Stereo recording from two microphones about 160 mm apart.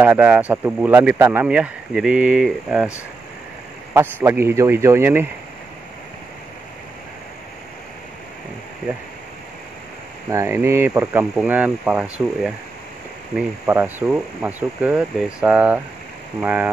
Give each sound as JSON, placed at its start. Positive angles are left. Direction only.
{"t": 0.0, "sound": "speech", "side_deg": -10}
{"t": 3.9, "sound": "speech", "side_deg": -15}
{"t": 10.3, "sound": "speech", "side_deg": -15}